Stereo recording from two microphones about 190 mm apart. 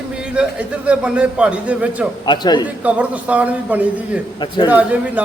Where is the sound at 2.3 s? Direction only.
25° left (ahead or behind).